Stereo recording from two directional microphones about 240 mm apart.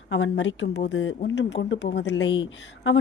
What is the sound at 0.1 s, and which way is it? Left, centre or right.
Speech, left.